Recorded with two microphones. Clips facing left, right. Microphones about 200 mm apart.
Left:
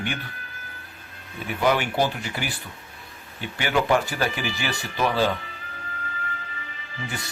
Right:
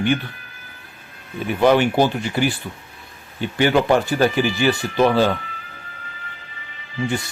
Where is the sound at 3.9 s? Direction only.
30° right (ahead or behind).